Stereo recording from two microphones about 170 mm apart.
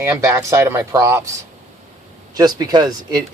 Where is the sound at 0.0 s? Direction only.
15° right (ahead or behind).